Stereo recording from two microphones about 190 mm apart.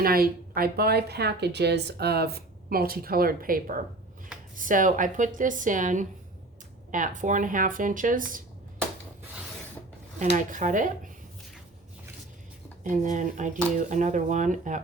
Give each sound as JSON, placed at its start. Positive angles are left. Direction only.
{"t": 0.0, "sound": "a woman's voice", "side_deg": -50}
{"t": 10.2, "sound": "speech", "side_deg": -40}
{"t": 12.8, "sound": "speech", "side_deg": -40}